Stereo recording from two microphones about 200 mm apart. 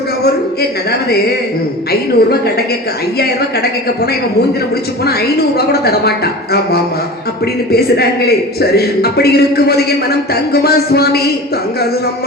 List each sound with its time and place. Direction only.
1.9 s a man's voice: 50° left (ahead or behind)
5.0 s a man's voice: 50° left (ahead or behind)